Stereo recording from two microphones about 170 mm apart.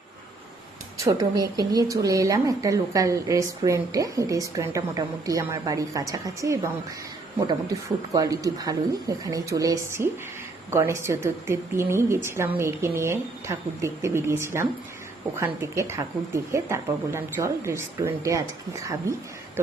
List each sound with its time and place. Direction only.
0.9 s speech: 20° right (ahead or behind)